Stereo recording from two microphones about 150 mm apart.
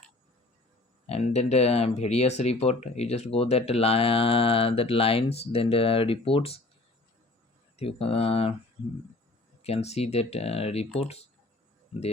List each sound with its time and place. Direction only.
1.0 s speech: 45° left (ahead or behind)
7.8 s speech: 40° left (ahead or behind)
9.6 s speech: 45° left (ahead or behind)